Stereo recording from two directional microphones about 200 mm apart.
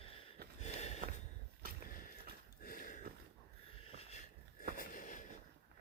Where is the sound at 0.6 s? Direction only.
35° left (ahead or behind).